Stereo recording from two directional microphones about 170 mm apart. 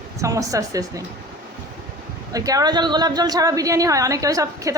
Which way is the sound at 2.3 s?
20° right (ahead or behind).